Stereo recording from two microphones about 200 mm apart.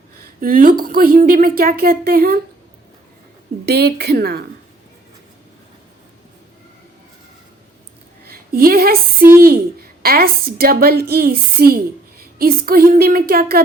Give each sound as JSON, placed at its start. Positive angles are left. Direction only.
{"t": 0.2, "sound": "a woman's voice", "side_deg": -45}
{"t": 3.7, "sound": "a woman's voice", "side_deg": -55}
{"t": 8.3, "sound": "a woman's voice", "side_deg": -50}